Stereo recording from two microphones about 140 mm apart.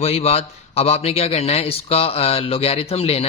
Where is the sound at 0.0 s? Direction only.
50° left (ahead or behind).